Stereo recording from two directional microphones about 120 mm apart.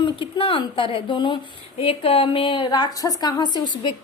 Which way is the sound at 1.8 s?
55° left (ahead or behind).